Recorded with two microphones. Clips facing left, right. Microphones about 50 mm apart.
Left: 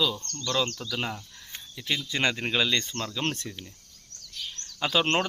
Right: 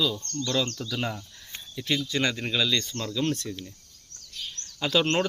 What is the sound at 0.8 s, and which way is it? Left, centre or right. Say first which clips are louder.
Speech: right 1 dB; centre.